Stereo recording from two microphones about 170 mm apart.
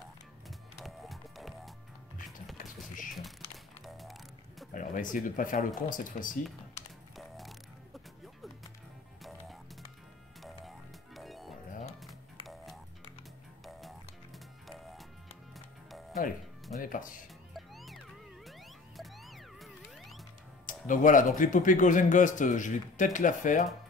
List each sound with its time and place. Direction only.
0.5 s music: centre (ahead or behind)
3.8 s music: centre (ahead or behind)
4.7 s speech: 50° left (ahead or behind)
7.2 s music: centre (ahead or behind)
11.1 s music: centre (ahead or behind)
13.7 s music: centre (ahead or behind)
16.8 s music: 55° left (ahead or behind)
17.6 s music: centre (ahead or behind)
18.9 s music: centre (ahead or behind)
20.6 s speech: 50° left (ahead or behind)